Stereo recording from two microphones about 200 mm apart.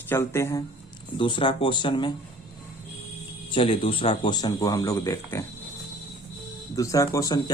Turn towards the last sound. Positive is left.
turn(degrees=20)  # may be behind; listen again after turning